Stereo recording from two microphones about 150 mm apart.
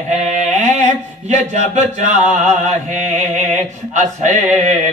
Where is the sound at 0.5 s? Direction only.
50° right (ahead or behind).